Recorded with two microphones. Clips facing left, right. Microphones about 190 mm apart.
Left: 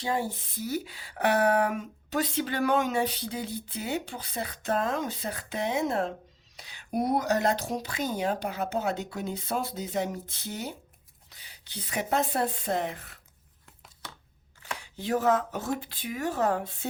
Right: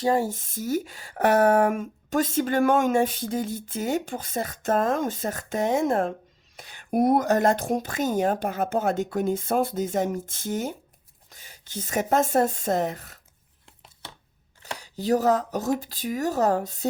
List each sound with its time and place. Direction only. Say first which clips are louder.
0.0 s speech: right 7 dB; 45° right (ahead or behind)
14.6 s speech: right 5 dB; 40° right (ahead or behind)